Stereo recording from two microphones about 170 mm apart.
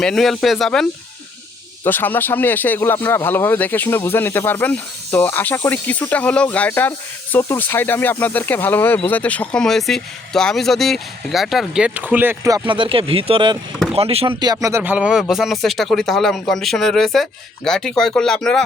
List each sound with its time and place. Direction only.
0.0 s speech: 5° left (ahead or behind); by 14.3 s 35° right (ahead or behind)
14.4 s speech: 20° right (ahead or behind); by 18.6 s 5° left (ahead or behind)